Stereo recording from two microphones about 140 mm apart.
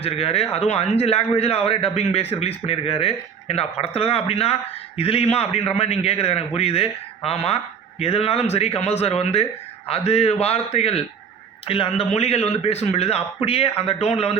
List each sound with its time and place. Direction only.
0.0 s a man's voice: 45° left (ahead or behind)